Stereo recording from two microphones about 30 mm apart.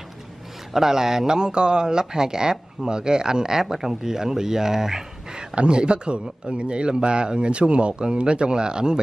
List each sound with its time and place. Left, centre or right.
0.7 s speech: centre
5.3 s a man's voice: right